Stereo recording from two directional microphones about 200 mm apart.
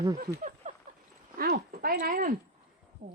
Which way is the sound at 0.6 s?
35° right (ahead or behind).